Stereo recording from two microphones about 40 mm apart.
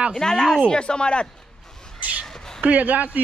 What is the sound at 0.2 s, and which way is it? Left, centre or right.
Speech, centre.